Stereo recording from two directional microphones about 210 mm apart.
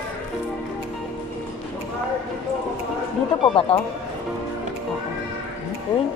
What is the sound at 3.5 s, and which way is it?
Speech, 25° left (ahead or behind).